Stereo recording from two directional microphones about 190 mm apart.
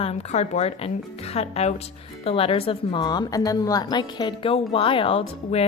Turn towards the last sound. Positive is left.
turn(degrees=30)  # may be behind; listen again after turning